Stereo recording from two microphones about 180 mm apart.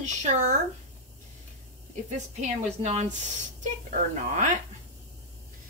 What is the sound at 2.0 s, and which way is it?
Speech, 40° right (ahead or behind).